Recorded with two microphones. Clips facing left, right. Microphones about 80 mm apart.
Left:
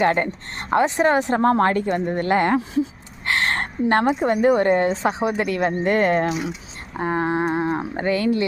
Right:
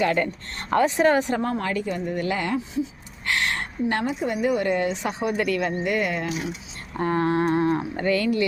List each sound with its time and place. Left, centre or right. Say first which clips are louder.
0.0 s speech: left 3 dB; left
1.4 s speech: left 8 dB; left
2.6 s speech: left 5 dB; left
3.2 s a woman's voice: left 4 dB; left
6.9 s speech: even; centre